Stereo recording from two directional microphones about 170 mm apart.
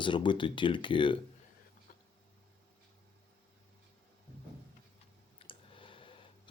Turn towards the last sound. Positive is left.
turn(degrees=30)  # may be behind; listen again after turning